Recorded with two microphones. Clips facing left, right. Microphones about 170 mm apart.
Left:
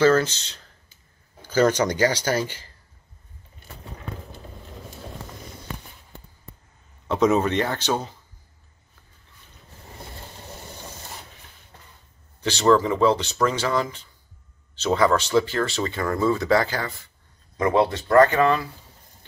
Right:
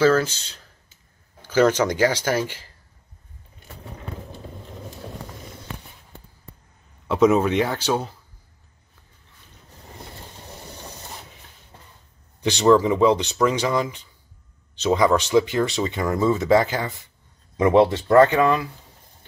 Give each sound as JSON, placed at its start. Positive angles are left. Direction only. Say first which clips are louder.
{"t": 0.0, "sound": "speech", "louder": "even", "side_deg": -5}
{"t": 1.9, "sound": "speech", "louder": "right 1 dB", "side_deg": -5}
{"t": 7.1, "sound": "speech", "louder": "right 2 dB", "side_deg": -5}
{"t": 12.4, "sound": "speech", "louder": "right 2 dB", "side_deg": -10}